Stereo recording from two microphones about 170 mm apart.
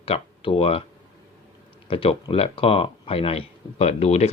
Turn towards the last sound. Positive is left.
turn(degrees=40)  # may be behind; listen again after turning